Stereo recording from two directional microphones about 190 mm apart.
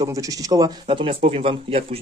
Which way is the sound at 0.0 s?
20° right (ahead or behind).